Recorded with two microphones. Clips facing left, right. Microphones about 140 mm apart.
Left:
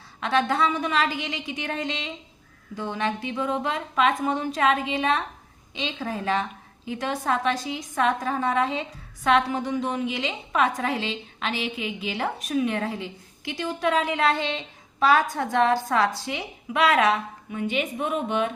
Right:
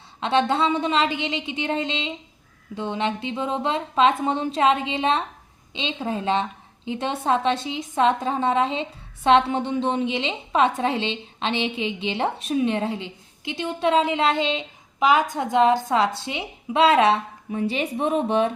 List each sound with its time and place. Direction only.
0.2 s a woman's voice: 25° right (ahead or behind)